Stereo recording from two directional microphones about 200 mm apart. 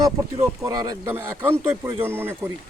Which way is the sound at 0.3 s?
15° right (ahead or behind).